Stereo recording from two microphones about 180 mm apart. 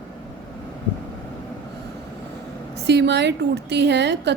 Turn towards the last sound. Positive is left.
turn(degrees=-70)  # may be behind; listen again after turning